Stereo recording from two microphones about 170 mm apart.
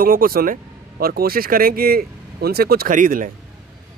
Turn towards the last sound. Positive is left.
turn(degrees=-50)  # may be behind; listen again after turning